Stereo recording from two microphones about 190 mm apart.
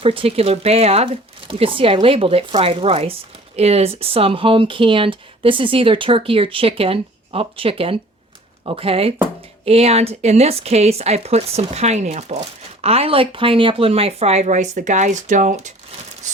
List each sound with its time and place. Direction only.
0.0 s speech: 30° right (ahead or behind)